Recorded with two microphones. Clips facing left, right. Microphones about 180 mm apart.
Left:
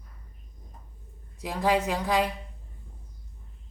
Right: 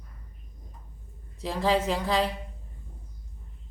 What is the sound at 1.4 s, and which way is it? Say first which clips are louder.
Speech: even; 15° left (ahead or behind).